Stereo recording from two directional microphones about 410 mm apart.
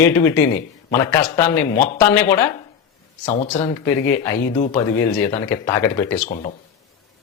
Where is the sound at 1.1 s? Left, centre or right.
Centre.